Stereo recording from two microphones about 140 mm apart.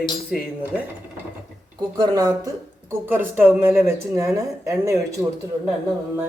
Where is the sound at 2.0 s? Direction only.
30° right (ahead or behind).